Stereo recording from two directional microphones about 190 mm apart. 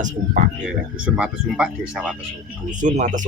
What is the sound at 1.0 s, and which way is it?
Speech, 5° right (ahead or behind).